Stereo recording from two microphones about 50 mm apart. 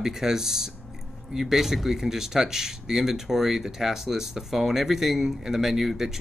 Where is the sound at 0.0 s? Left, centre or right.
Centre.